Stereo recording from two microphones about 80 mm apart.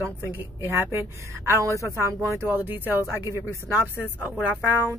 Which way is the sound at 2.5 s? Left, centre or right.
Right.